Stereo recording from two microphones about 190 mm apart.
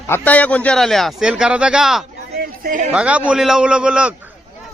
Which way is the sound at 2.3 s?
50° right (ahead or behind).